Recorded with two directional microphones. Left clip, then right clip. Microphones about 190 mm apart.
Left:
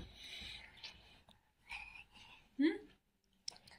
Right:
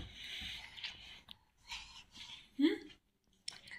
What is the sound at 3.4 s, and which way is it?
Chewing, 60° left (ahead or behind).